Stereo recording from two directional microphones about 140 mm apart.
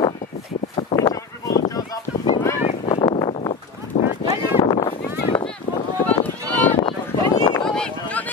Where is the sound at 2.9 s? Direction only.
35° left (ahead or behind).